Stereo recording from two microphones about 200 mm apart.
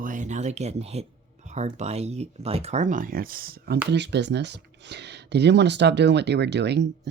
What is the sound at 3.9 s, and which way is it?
Speech, 60° right (ahead or behind).